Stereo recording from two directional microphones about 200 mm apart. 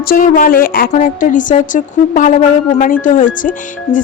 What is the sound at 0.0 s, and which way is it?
Speech, 45° left (ahead or behind).